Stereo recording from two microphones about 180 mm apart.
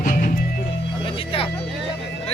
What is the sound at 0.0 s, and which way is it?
Music, 45° left (ahead or behind).